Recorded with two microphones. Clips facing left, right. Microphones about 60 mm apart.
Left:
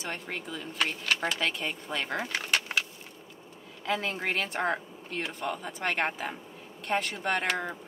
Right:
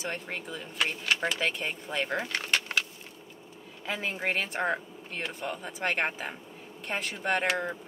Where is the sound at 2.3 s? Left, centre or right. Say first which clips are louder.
Left 1 dB; centre.